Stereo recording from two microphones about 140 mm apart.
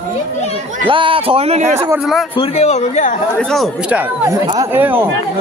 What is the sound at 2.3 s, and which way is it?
Speech, 50° left (ahead or behind).